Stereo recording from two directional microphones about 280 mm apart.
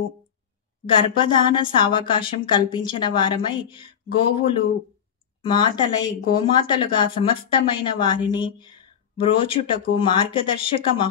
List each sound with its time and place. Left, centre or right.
0.9 s speech: centre